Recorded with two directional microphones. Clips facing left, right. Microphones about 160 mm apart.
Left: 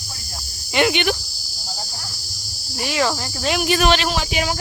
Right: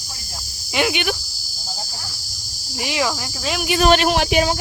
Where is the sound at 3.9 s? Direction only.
60° right (ahead or behind).